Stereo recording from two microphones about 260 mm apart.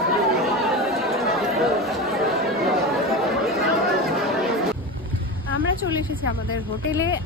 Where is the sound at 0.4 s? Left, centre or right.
Centre.